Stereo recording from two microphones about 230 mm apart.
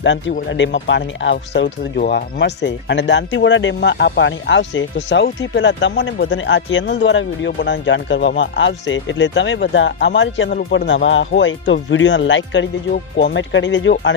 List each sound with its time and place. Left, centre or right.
0.0 s speech: left